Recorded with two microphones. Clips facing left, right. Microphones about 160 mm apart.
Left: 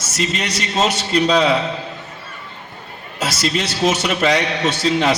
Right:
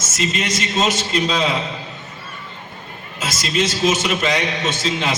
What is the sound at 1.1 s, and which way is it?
Speech, 35° left (ahead or behind).